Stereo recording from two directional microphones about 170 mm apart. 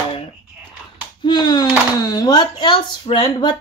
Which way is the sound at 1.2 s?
25° left (ahead or behind).